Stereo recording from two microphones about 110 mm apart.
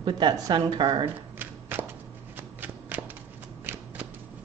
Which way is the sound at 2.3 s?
15° right (ahead or behind).